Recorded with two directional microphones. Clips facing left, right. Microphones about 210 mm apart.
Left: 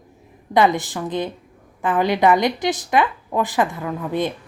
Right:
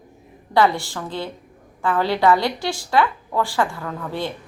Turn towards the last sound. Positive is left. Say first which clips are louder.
# left 4 dB
turn(degrees=20)  # may be behind; listen again after turning